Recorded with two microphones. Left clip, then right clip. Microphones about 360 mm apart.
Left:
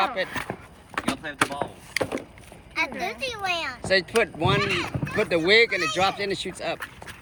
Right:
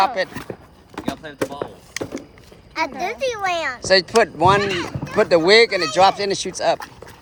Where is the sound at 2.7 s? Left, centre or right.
Right.